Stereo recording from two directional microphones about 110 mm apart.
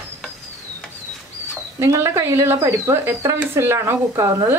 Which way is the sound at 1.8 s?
25° right (ahead or behind).